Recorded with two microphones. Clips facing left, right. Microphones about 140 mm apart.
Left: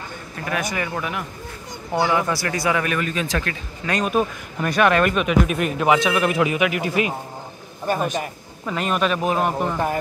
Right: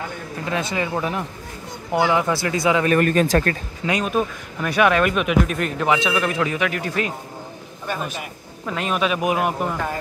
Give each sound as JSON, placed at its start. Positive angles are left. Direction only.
{"t": 0.5, "sound": "speech", "side_deg": -25}
{"t": 3.0, "sound": "speech", "side_deg": -50}
{"t": 4.0, "sound": "speech", "side_deg": 5}
{"t": 7.8, "sound": "speech", "side_deg": 45}
{"t": 8.6, "sound": "speech", "side_deg": 0}